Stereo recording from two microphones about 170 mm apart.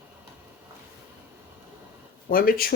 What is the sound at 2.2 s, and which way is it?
Speech, 55° left (ahead or behind).